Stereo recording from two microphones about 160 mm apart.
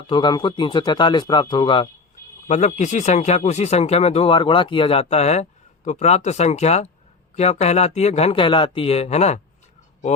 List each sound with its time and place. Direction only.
0.1 s speech: 30° left (ahead or behind)
2.5 s speech: 45° left (ahead or behind)